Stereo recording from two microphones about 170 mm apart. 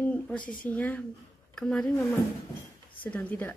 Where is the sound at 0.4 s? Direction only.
55° left (ahead or behind).